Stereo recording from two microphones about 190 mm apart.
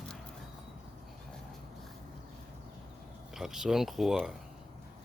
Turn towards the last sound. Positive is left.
turn(degrees=0)  # may be behind; listen again after turning